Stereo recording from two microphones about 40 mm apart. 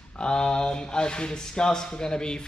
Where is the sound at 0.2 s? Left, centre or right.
Left.